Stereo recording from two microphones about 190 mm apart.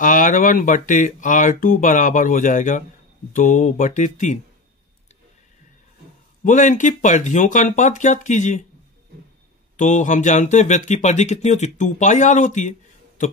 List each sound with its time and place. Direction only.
0.0 s speech: 45° left (ahead or behind)
6.4 s speech: 40° left (ahead or behind)
9.8 s speech: 40° left (ahead or behind)